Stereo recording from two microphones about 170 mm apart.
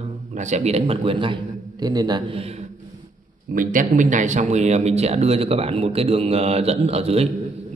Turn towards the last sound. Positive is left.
turn(degrees=-35)  # may be behind; listen again after turning